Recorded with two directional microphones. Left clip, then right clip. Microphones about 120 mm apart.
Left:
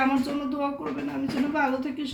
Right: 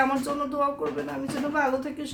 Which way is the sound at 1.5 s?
40° right (ahead or behind).